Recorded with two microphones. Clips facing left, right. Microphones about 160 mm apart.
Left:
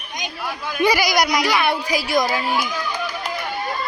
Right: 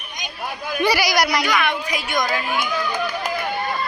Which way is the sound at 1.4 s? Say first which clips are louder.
Left 2 dB; 35° left (ahead or behind).